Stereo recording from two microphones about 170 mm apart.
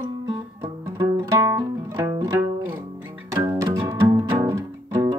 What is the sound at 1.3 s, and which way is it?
Music, 20° right (ahead or behind).